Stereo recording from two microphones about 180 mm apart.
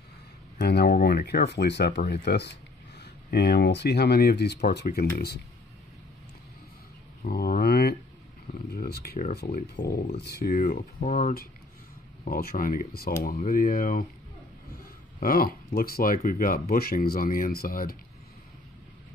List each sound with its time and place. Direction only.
0.6 s speech: 60° left (ahead or behind)
7.2 s a sound: 55° left (ahead or behind)
8.6 s speech: 60° left (ahead or behind)
11.0 s speech: 40° left (ahead or behind)
12.3 s speech: 55° left (ahead or behind)
15.1 s speech: 55° left (ahead or behind)